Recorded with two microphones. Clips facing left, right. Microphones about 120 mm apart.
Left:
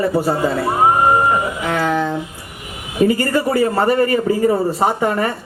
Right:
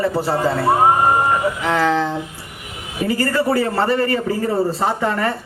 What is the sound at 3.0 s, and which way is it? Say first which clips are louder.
A man's voice: left 2 dB; 20° left (ahead or behind).